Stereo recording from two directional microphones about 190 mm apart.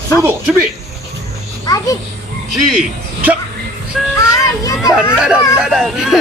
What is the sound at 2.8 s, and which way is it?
Speech, 5° right (ahead or behind).